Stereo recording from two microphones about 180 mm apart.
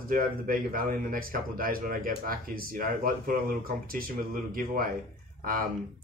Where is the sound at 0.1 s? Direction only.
50° right (ahead or behind).